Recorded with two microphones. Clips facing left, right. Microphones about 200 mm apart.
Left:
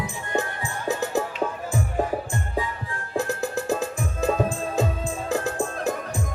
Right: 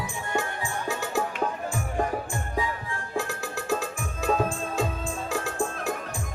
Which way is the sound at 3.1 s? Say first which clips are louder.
Left 6 dB; 20° left (ahead or behind).